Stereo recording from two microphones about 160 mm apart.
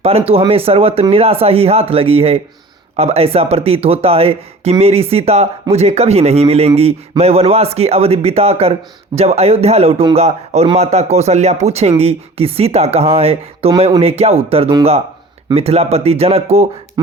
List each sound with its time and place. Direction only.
0.3 s speech: 35° right (ahead or behind)